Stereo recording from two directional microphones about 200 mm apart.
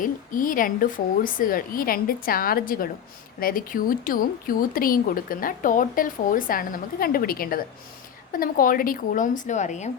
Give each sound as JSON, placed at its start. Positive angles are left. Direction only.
{"t": 0.0, "sound": "a woman's voice", "side_deg": 45}